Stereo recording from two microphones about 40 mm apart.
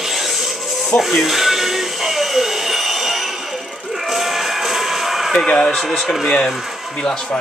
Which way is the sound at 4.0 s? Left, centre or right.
Centre.